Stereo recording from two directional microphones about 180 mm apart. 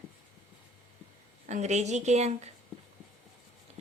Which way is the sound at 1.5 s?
40° right (ahead or behind).